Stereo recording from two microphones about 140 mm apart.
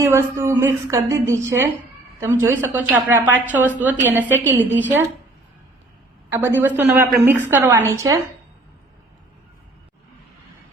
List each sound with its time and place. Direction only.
0.0 s a woman's voice: 20° right (ahead or behind)
6.3 s a woman's voice: 15° right (ahead or behind)